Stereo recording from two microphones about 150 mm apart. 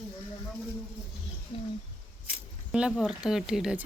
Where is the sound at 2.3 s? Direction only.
5° right (ahead or behind).